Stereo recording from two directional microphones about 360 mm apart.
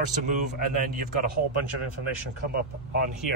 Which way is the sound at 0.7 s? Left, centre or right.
Right.